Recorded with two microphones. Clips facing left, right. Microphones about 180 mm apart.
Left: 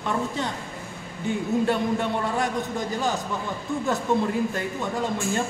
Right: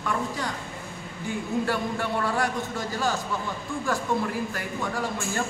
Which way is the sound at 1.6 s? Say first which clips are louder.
Left 4 dB; 20° left (ahead or behind).